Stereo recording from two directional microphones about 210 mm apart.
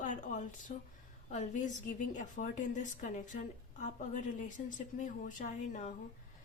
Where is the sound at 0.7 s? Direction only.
35° left (ahead or behind).